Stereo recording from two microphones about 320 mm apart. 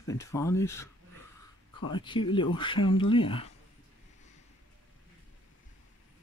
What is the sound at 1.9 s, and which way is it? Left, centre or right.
Speech, centre.